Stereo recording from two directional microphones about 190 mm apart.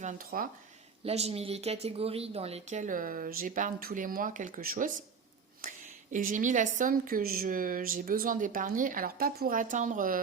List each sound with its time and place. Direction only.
0.0 s speech: 45° right (ahead or behind)
1.0 s a woman's voice: 35° right (ahead or behind)